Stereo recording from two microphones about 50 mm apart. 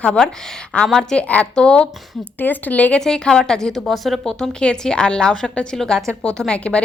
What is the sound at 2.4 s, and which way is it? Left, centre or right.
Speech, left.